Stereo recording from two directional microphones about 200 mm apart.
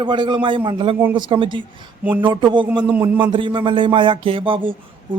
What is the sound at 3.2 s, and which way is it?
Speech, 25° right (ahead or behind).